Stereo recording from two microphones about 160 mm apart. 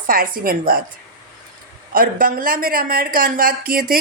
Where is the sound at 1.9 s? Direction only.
60° right (ahead or behind).